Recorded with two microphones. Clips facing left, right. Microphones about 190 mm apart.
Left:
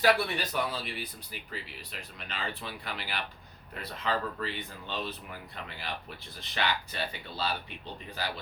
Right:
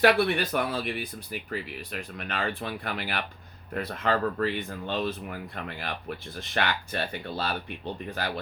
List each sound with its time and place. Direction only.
0.0 s speech: 60° right (ahead or behind)